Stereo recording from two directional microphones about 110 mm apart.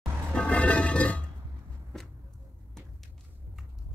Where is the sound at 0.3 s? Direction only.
10° left (ahead or behind).